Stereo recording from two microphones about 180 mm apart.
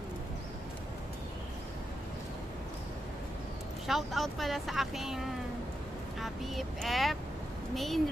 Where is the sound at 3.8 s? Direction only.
Centre (ahead or behind).